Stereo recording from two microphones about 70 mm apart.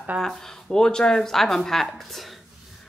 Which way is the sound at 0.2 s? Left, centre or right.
Centre.